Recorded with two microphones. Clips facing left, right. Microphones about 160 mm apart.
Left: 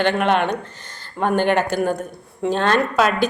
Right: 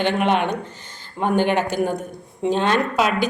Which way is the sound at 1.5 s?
15° right (ahead or behind).